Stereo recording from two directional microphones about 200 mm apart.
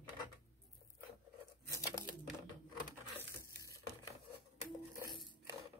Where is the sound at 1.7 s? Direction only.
15° left (ahead or behind).